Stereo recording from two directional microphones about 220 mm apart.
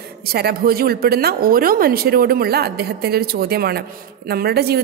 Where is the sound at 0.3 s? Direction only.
45° right (ahead or behind).